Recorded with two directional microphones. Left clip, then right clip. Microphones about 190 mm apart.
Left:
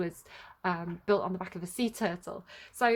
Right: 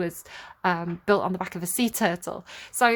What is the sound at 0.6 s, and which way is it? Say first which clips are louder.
Speech: right 8 dB; 25° right (ahead or behind).